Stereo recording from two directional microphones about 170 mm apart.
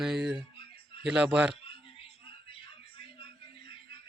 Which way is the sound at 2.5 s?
30° left (ahead or behind).